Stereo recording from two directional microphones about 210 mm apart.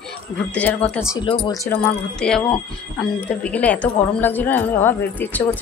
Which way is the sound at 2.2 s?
5° left (ahead or behind).